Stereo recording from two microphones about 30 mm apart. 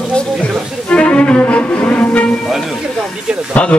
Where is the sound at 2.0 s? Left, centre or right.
Left.